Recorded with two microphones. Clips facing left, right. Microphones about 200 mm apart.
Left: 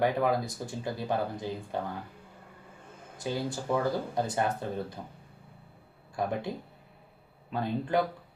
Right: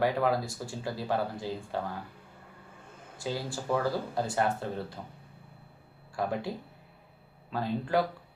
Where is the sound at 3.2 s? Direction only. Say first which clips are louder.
Left 2 dB; 20° left (ahead or behind).